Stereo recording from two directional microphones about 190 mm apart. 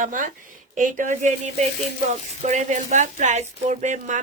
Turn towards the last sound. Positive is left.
turn(degrees=-40)  # may be behind; listen again after turning